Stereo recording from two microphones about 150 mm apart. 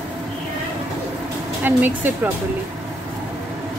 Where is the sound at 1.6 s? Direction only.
10° right (ahead or behind).